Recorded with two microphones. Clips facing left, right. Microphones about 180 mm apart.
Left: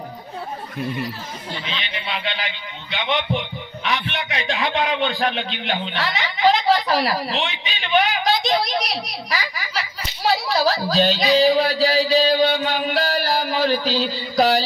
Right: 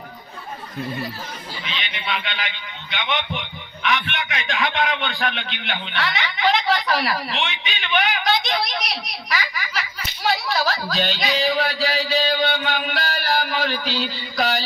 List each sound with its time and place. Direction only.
1.7 s a man's voice: 35° left (ahead or behind)